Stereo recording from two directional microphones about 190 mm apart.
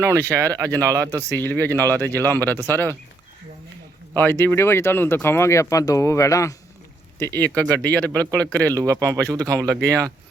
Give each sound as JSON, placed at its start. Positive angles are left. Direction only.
{"t": 0.0, "sound": "speech", "side_deg": -15}
{"t": 1.4, "sound": "speech", "side_deg": 10}
{"t": 4.1, "sound": "speech", "side_deg": 10}
{"t": 8.7, "sound": "speech", "side_deg": -15}